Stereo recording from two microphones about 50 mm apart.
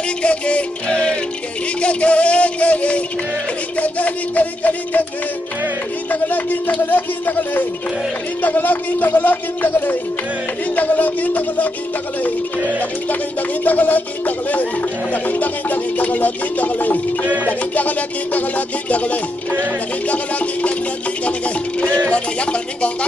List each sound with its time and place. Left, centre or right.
0.2 s music: left
3.7 s speech: left
6.0 s speech: left
13.7 s speech: left
18.9 s music: left